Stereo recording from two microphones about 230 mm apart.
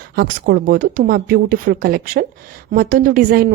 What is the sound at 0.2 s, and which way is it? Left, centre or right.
A woman's voice, right.